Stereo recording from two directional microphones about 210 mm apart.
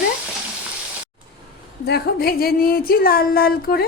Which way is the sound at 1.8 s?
50° left (ahead or behind).